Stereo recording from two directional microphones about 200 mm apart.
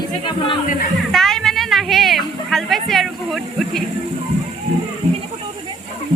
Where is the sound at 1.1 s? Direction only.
Centre (ahead or behind).